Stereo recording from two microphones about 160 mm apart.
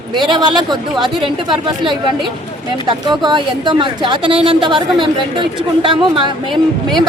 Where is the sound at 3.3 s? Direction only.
30° right (ahead or behind).